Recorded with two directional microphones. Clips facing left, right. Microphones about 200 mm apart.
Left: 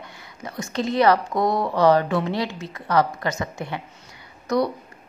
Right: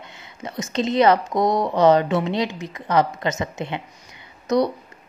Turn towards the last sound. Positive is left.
turn(degrees=-20)  # may be behind; listen again after turning